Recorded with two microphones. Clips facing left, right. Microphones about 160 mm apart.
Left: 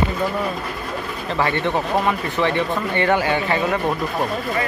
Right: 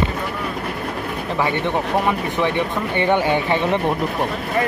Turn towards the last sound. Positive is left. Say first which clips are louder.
# right 2 dB
turn(degrees=-25)  # may be behind; listen again after turning